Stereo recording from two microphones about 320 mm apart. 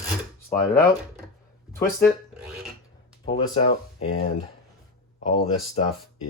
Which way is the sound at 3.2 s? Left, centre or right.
Centre.